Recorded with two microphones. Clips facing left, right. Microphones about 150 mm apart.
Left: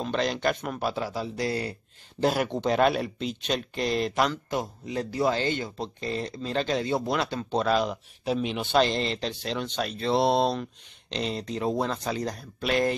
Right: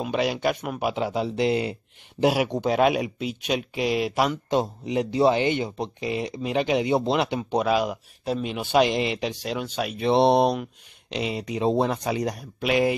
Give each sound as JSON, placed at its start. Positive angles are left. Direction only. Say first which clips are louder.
{"t": 0.0, "sound": "speech", "louder": "right 2 dB", "side_deg": -10}
{"t": 4.5, "sound": "speech", "louder": "right 6 dB", "side_deg": -20}
{"t": 11.6, "sound": "speech", "louder": "right 5 dB", "side_deg": -20}